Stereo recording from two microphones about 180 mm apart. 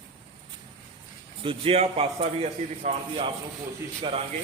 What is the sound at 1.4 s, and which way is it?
A man's voice, 30° right (ahead or behind).